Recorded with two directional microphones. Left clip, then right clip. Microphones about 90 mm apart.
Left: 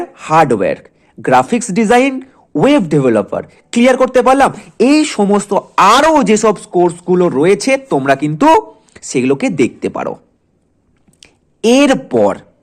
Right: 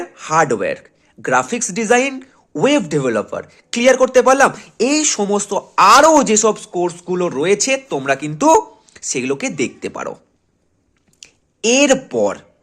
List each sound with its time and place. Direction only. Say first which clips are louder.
0.0 s speech: left 5 dB; 45° left (ahead or behind)
2.1 s a woman's voice: left 8 dB; 35° left (ahead or behind)
5.7 s a woman's voice: even; 55° left (ahead or behind)
11.2 s a sound: left 5 dB; 50° left (ahead or behind)